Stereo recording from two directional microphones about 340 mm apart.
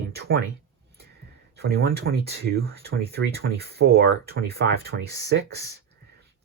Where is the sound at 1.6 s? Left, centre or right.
Right.